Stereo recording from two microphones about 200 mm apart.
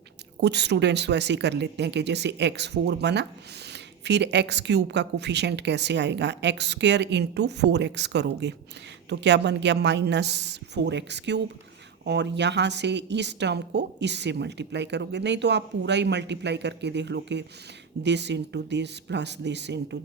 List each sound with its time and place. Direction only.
0.3 s a woman's voice: 55° right (ahead or behind)